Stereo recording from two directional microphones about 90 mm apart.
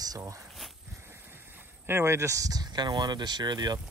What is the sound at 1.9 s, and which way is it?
Speech, 25° right (ahead or behind).